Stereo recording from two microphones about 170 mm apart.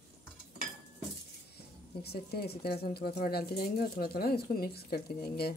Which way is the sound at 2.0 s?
70° left (ahead or behind).